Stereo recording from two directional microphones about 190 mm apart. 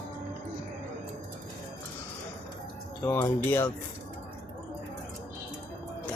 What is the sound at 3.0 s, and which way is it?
Speech, 15° left (ahead or behind).